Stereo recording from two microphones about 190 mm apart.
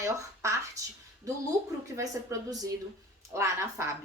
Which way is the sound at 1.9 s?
20° right (ahead or behind).